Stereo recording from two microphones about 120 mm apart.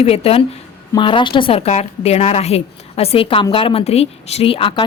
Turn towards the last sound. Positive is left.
turn(degrees=50)  # may be behind; listen again after turning